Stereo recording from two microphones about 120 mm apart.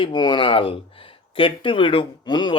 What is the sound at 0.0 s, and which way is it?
Speech, 40° left (ahead or behind).